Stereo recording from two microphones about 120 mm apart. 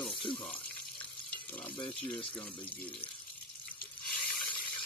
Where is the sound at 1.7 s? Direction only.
45° left (ahead or behind).